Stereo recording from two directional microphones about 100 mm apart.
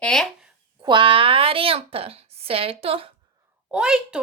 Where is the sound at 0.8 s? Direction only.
55° right (ahead or behind); by 3.1 s 70° right (ahead or behind).